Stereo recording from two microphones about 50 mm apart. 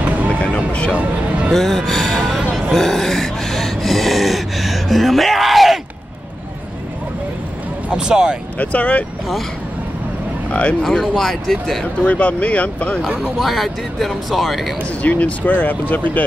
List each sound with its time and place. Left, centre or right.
0.0 s vehicle: right
0.4 s vehicle: left
1.5 s music: centre
2.5 s gasp: centre
7.9 s speech: centre
8.5 s speech: left
10.5 s speech: left
10.8 s speech: centre
11.8 s speech: left
13.4 s speech: centre
15.0 s speech: left